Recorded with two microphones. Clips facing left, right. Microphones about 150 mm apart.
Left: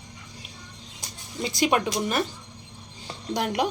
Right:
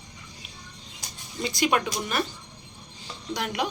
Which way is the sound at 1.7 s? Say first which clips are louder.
Left 2 dB; 25° left (ahead or behind).